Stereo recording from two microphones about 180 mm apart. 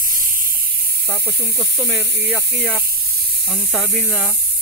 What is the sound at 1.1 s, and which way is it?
Speech, 10° left (ahead or behind).